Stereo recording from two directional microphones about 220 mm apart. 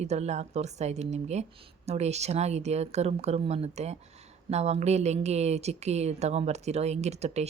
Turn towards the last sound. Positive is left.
turn(degrees=-30)  # may be behind; listen again after turning